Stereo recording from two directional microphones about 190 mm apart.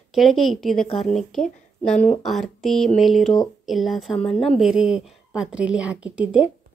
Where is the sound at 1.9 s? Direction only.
40° left (ahead or behind).